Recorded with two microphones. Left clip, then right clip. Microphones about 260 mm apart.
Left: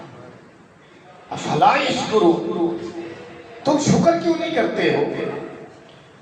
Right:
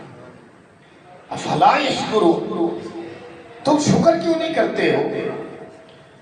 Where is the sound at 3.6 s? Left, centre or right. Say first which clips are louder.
Right 2 dB; right.